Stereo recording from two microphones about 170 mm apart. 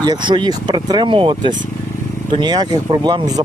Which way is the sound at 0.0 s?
25° right (ahead or behind).